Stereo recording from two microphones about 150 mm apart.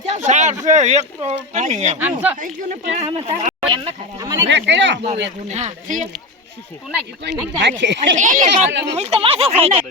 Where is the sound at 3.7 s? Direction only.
40° right (ahead or behind); by 6.0 s 55° right (ahead or behind).